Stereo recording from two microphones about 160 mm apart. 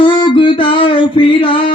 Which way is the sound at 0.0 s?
30° left (ahead or behind).